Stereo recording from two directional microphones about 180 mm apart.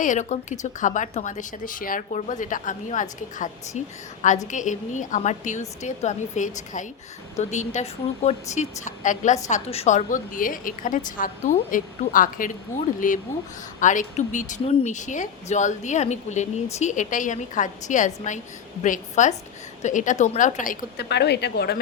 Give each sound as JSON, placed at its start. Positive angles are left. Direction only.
{"t": 0.0, "sound": "a woman's voice", "side_deg": 45}
{"t": 21.0, "sound": "speech", "side_deg": 70}